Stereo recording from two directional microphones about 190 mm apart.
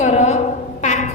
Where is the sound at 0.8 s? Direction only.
40° left (ahead or behind).